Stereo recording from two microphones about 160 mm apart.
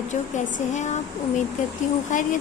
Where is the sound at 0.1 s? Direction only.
50° left (ahead or behind).